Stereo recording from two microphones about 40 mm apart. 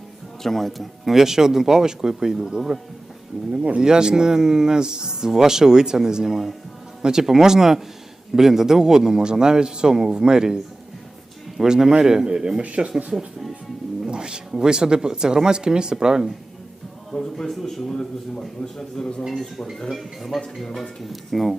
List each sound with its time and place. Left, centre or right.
0.4 s speech: centre
1.1 s speech: centre
3.5 s speech: right
3.8 s speech: centre
14.1 s speech: centre
17.1 s a sound: centre
17.5 s speech: centre
17.9 s a man's voice: centre
19.3 s a man's voice: centre
21.0 s speech: centre